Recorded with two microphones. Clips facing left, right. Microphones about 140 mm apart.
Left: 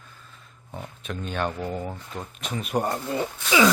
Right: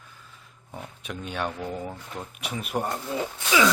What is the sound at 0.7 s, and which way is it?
A man's voice, 10° right (ahead or behind).